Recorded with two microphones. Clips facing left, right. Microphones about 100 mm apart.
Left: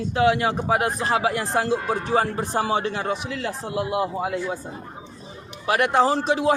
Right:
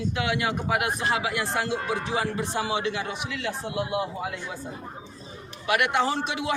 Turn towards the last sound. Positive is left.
turn(degrees=35)  # may be behind; listen again after turning